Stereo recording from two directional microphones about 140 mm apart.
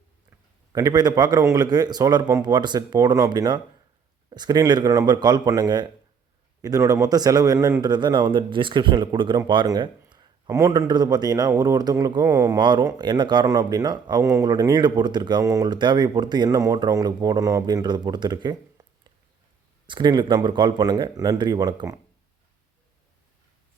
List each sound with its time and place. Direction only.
0.7 s a man's voice: 25° right (ahead or behind)
19.9 s a man's voice: 35° right (ahead or behind)